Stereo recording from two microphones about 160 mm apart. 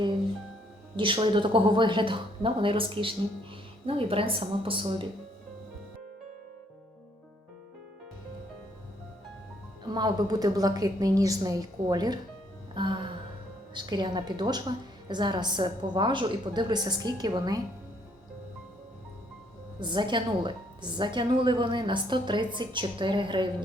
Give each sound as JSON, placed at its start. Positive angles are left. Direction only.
{"t": 0.9, "sound": "a woman's voice", "side_deg": -30}
{"t": 9.9, "sound": "a woman's voice", "side_deg": -25}
{"t": 19.8, "sound": "a woman's voice", "side_deg": -30}